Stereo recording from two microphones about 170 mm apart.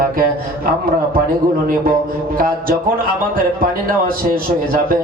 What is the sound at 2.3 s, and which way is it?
A man's voice, 55° right (ahead or behind).